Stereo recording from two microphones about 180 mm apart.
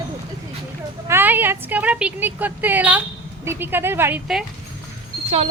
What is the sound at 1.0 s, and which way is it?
Speech, 10° right (ahead or behind).